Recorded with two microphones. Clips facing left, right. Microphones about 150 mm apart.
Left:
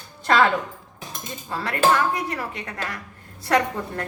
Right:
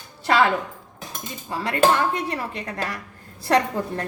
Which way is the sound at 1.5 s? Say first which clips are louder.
Right 1 dB; 20° right (ahead or behind).